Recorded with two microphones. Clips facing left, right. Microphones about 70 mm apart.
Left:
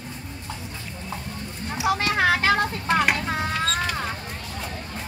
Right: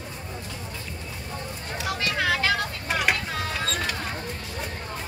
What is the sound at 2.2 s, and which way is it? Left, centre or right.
Vehicle, left.